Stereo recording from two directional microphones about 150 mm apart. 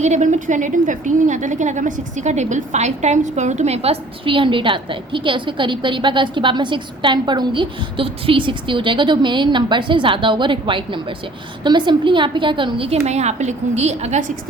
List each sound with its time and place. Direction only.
0.0 s a woman's voice: 50° right (ahead or behind)